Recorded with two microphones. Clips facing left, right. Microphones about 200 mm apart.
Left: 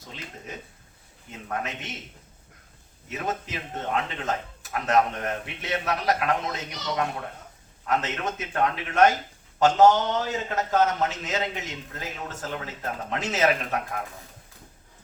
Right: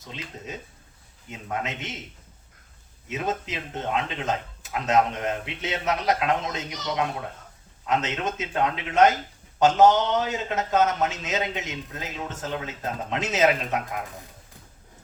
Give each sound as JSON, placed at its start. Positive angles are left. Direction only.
{"t": 1.5, "sound": "a man's voice", "side_deg": -20}
{"t": 3.1, "sound": "a man's voice", "side_deg": -20}